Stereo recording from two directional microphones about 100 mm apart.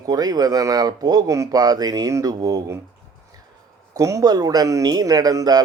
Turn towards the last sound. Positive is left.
turn(degrees=-40)  # may be behind; listen again after turning